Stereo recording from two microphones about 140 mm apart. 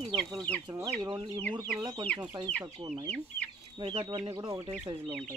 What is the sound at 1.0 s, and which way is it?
Speech, 40° right (ahead or behind).